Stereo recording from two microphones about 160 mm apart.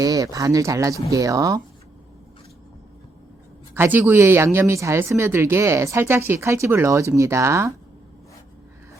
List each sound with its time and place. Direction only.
0.0 s speech: 20° right (ahead or behind)
3.8 s speech: 15° right (ahead or behind)